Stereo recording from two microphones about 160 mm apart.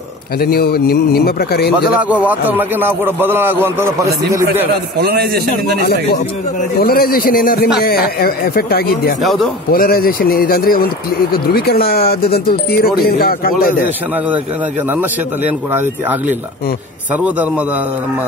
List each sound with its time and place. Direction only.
0.4 s speech: 75° left (ahead or behind)
2.0 s a man's voice: 10° right (ahead or behind)
4.9 s a man's voice: 85° right
6.8 s speech: 70° left (ahead or behind)
9.2 s speech: centre (ahead or behind)
9.7 s speech: 65° left (ahead or behind)
14.9 s a man's voice: 10° right (ahead or behind)